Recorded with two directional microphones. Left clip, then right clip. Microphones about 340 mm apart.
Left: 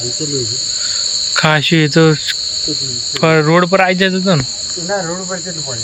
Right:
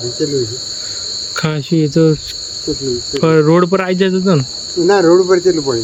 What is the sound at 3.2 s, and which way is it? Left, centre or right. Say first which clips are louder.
Cricket: even; centre.